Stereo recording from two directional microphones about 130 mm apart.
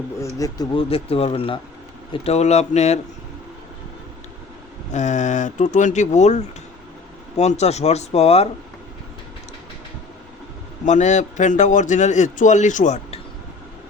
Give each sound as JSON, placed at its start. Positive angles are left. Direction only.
{"t": 0.3, "sound": "speech", "side_deg": 30}
{"t": 0.8, "sound": "speech", "side_deg": 45}
{"t": 4.9, "sound": "a man's voice", "side_deg": 70}
{"t": 10.8, "sound": "a man's voice", "side_deg": 65}